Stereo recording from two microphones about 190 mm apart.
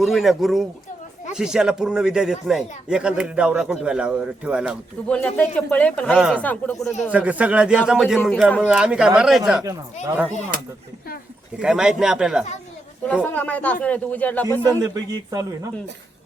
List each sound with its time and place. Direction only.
0.0 s a man's voice: centre (ahead or behind)
5.0 s speech: 5° left (ahead or behind)
6.1 s a man's voice: 5° right (ahead or behind)
6.4 s speech: 10° left (ahead or behind)
7.1 s a man's voice: 10° right (ahead or behind)
9.6 s speech: 15° right (ahead or behind)
11.6 s a man's voice: 5° right (ahead or behind)
13.2 s speech: 10° left (ahead or behind)
14.6 s speech: 20° right (ahead or behind)